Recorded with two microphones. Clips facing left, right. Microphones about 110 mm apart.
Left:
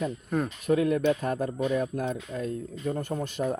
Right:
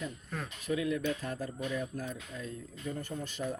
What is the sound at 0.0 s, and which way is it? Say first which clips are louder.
Speech: left 11 dB; 50° left (ahead or behind).